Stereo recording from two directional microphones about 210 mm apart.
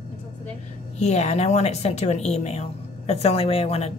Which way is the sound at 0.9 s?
30° left (ahead or behind).